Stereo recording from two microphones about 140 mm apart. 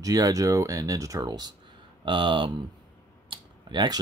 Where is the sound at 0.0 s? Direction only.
25° right (ahead or behind).